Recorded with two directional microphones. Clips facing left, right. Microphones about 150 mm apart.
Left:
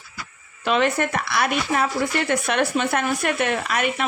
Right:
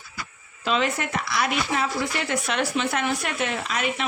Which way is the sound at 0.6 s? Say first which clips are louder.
Left 4 dB; 60° left (ahead or behind).